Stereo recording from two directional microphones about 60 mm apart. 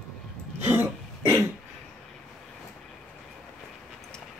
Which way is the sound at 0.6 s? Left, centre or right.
Right.